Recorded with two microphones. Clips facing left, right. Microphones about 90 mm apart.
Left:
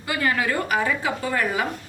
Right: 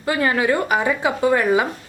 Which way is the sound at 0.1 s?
30° right (ahead or behind).